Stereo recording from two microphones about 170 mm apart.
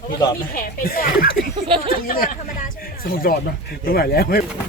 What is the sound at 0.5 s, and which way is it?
Speech, 55° left (ahead or behind).